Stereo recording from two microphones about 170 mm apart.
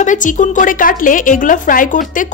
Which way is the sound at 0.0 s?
50° left (ahead or behind).